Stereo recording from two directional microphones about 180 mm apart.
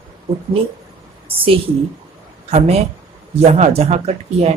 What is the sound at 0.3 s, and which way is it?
Speech, 35° right (ahead or behind).